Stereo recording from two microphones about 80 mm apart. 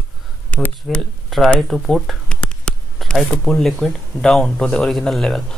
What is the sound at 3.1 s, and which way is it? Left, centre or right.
Speech, centre.